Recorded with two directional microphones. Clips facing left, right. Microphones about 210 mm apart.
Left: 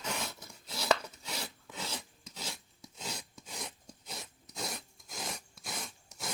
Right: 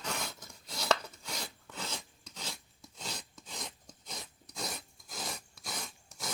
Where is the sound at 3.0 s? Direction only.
10° left (ahead or behind).